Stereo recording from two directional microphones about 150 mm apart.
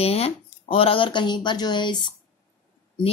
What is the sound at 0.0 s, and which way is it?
Speech, 45° left (ahead or behind).